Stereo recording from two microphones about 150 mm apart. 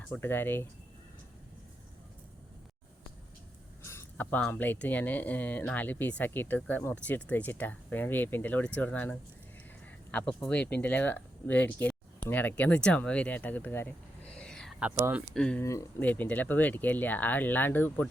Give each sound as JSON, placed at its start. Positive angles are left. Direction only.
{"t": 0.0, "sound": "speech", "side_deg": 15}
{"t": 3.8, "sound": "speech", "side_deg": 15}
{"t": 14.9, "sound": "speech", "side_deg": -15}
{"t": 15.3, "sound": "speech", "side_deg": 5}
{"t": 15.6, "sound": "speech", "side_deg": 20}